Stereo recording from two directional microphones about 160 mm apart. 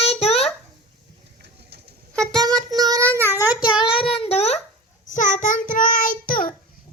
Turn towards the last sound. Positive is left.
turn(degrees=60)  # may be behind; listen again after turning